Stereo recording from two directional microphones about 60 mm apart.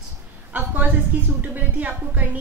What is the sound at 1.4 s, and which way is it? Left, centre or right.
Speech, right.